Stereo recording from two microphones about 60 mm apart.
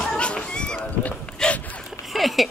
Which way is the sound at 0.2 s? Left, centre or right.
Centre.